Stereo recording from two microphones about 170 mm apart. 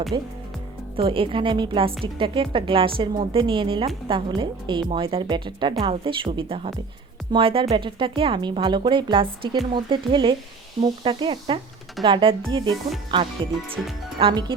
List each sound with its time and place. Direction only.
0.1 s a woman's voice: 25° right (ahead or behind)